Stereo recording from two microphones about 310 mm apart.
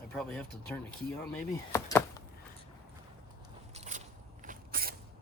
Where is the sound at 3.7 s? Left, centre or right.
Right.